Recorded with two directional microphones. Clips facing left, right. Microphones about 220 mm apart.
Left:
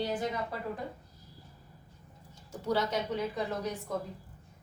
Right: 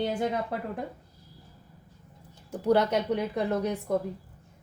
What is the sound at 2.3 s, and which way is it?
Speech, 60° right (ahead or behind).